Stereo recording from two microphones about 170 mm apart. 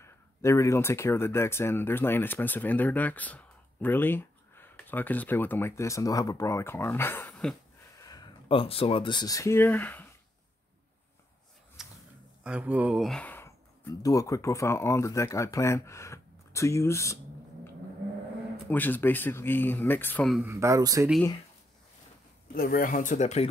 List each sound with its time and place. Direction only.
0.0 s speech: 15° left (ahead or behind)
8.0 s speech: 25° left (ahead or behind)
11.8 s a sound: 5° right (ahead or behind)
12.4 s speech: 10° right (ahead or behind); by 17.2 s 15° left (ahead or behind)
18.7 s speech: 10° left (ahead or behind)
20.4 s speech: 15° right (ahead or behind)
22.5 s speech: 60° left (ahead or behind); by 23.5 s 40° left (ahead or behind)